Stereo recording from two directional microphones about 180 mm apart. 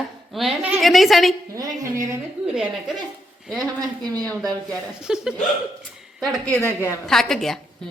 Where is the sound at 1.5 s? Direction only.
20° right (ahead or behind).